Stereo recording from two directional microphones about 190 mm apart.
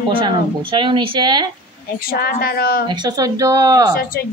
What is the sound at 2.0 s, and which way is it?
Speech, 50° left (ahead or behind).